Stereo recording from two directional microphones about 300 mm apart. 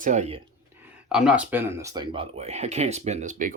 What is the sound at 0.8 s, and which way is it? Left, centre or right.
Speech, centre.